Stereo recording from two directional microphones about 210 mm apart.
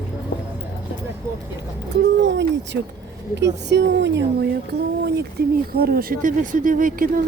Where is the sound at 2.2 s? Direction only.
60° right (ahead or behind); by 7.2 s 40° right (ahead or behind).